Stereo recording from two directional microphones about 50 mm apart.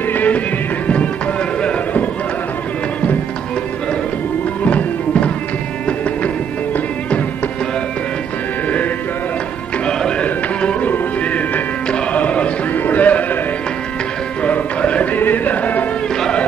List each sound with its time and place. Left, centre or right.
0.1 s music: left
4.6 s music: left
9.8 s music: left
11.9 s a sound: left
14.4 s music: left
15.1 s music: left
16.2 s music: centre